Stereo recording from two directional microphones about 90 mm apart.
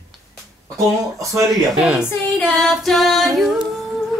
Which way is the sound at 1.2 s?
35° right (ahead or behind).